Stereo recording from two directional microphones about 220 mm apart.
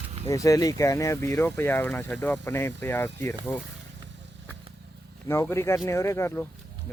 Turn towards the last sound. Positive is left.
turn(degrees=10)  # may be behind; listen again after turning